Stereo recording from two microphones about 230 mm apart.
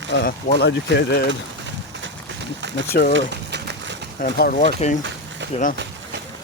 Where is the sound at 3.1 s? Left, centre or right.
Right.